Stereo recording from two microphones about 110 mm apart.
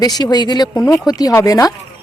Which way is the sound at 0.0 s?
35° left (ahead or behind).